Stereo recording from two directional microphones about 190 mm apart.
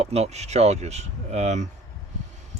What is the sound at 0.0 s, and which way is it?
Speech, 35° right (ahead or behind).